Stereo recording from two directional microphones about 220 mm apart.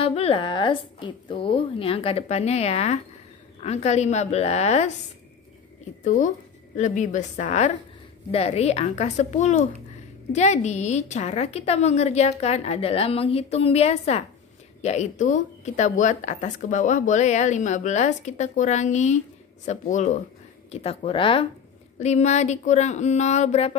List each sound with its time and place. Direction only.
0.0 s a woman's voice: 25° left (ahead or behind)
6.0 s a woman's voice: 35° left (ahead or behind)